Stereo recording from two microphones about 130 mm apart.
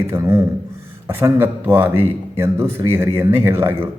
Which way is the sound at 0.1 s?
25° right (ahead or behind).